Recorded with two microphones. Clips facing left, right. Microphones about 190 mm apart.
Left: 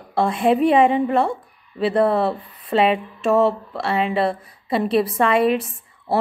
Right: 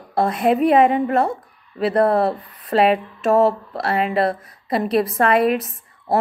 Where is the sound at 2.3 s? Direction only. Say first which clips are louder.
Left 1 dB; 25° left (ahead or behind).